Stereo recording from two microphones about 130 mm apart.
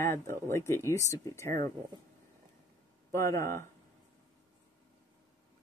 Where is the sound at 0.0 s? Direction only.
20° left (ahead or behind).